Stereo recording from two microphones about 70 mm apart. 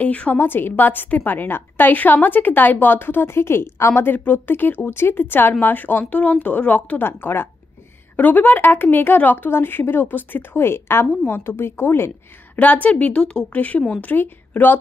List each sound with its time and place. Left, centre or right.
0.0 s a woman's voice: left
12.5 s a woman's voice: left